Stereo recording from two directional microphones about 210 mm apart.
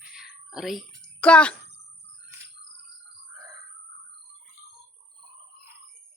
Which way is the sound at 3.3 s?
15° right (ahead or behind).